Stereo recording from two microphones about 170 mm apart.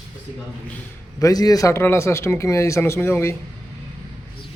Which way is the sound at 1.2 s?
20° left (ahead or behind).